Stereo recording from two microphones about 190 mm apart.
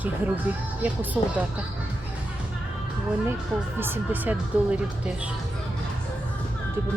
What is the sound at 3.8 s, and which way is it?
Speech, 10° right (ahead or behind).